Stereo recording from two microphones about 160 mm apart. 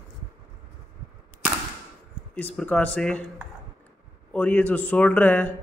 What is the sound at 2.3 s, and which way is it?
Speech, 10° left (ahead or behind).